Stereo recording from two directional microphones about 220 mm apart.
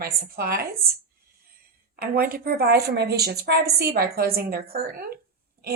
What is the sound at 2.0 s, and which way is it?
A woman's voice, 40° right (ahead or behind).